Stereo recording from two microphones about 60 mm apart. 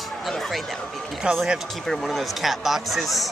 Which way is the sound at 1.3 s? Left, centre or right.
Centre.